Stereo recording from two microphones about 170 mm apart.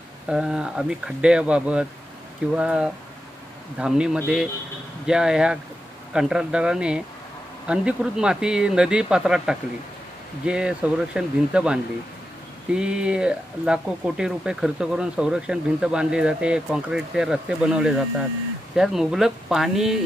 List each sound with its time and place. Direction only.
0.3 s speech: 5° right (ahead or behind)